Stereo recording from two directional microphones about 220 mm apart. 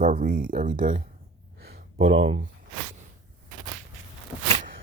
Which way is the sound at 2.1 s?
25° right (ahead or behind).